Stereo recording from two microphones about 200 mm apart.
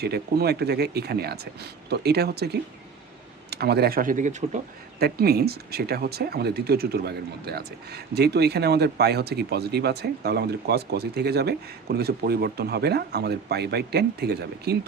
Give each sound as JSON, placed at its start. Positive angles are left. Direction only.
{"t": 0.0, "sound": "speech", "side_deg": -55}
{"t": 4.9, "sound": "speech", "side_deg": -50}